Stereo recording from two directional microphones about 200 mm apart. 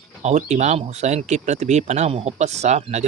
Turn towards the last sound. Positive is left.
turn(degrees=-35)  # may be behind; listen again after turning